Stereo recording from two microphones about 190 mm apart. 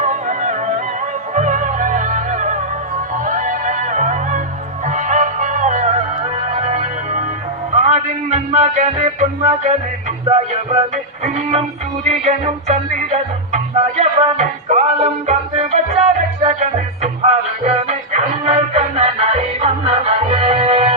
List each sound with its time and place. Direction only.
0.0 s music: 40° right (ahead or behind)
10.2 s music: 35° right (ahead or behind)